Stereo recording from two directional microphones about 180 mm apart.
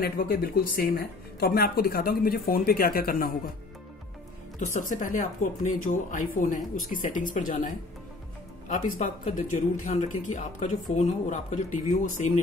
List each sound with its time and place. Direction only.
0.0 s speech: 55° left (ahead or behind)
4.6 s speech: 45° left (ahead or behind)